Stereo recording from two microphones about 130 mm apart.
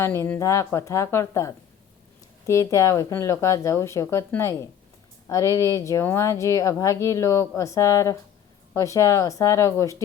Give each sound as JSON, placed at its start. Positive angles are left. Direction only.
{"t": 0.0, "sound": "speech", "side_deg": 20}